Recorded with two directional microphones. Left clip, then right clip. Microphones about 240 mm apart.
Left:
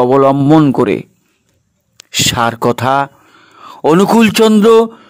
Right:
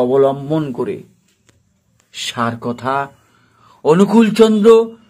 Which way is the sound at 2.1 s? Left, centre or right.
Left.